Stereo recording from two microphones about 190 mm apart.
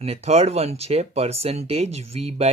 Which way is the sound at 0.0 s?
35° right (ahead or behind).